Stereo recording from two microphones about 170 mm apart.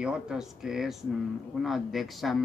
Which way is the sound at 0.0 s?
5° right (ahead or behind).